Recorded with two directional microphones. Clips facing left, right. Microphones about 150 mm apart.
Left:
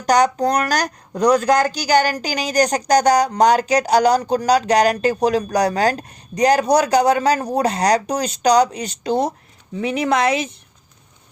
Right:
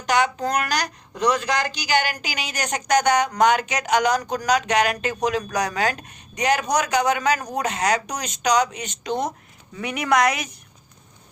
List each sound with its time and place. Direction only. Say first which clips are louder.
0.0 s speech: left 6 dB; 40° left (ahead or behind)